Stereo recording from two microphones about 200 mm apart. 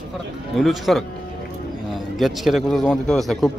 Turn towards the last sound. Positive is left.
turn(degrees=0)  # may be behind; listen again after turning